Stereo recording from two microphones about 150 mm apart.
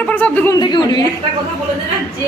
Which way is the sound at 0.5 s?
30° left (ahead or behind).